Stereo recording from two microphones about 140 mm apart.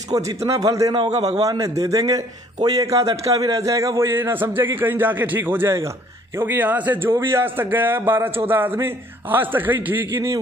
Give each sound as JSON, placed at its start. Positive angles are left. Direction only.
{"t": 0.1, "sound": "a man's voice", "side_deg": -25}